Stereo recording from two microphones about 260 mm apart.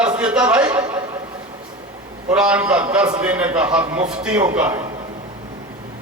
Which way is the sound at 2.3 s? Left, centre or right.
Centre.